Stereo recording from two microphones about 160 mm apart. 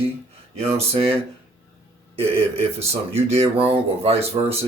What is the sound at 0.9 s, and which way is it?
Speech, 40° right (ahead or behind).